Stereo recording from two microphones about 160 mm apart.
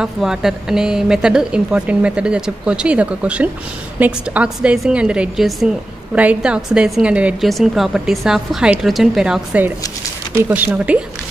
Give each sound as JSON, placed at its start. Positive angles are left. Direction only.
{"t": 0.0, "sound": "a woman's voice", "side_deg": -5}